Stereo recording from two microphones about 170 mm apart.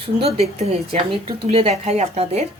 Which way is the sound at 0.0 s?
35° right (ahead or behind).